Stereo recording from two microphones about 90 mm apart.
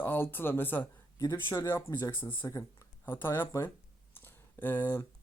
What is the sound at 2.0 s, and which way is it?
Speech, 25° left (ahead or behind).